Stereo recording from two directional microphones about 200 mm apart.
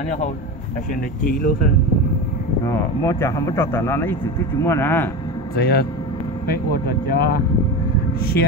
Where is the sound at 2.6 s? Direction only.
15° left (ahead or behind).